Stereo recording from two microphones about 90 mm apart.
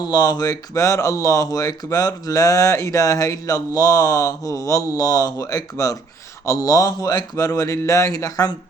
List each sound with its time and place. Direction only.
0.0 s speech: 45° left (ahead or behind)
0.7 s speech: 35° left (ahead or behind)